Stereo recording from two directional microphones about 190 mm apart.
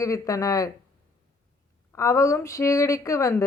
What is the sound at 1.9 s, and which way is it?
A woman's voice, 15° left (ahead or behind).